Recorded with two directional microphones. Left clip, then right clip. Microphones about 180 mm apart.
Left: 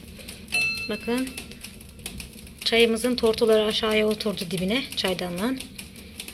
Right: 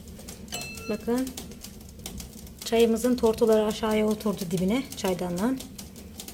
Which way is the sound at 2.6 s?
5° right (ahead or behind).